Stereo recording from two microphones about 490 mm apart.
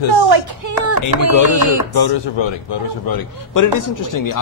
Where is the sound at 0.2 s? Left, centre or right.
Right.